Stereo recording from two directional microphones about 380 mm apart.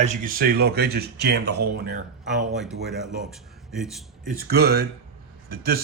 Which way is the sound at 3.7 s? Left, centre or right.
Centre.